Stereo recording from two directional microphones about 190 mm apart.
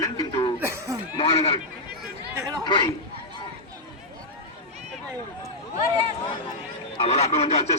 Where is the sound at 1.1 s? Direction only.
30° left (ahead or behind).